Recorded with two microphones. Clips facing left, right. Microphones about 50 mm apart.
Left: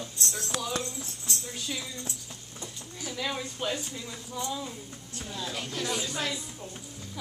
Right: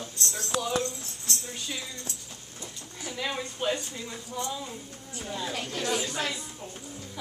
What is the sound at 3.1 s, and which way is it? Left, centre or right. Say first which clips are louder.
Speech: right 1 dB; centre.